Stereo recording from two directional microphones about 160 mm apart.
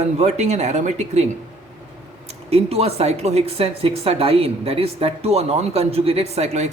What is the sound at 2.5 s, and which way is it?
Speech, 40° right (ahead or behind).